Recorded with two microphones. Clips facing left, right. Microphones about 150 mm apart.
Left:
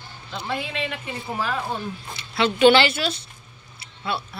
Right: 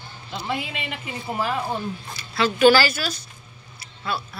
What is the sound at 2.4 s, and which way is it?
Speech, 25° left (ahead or behind).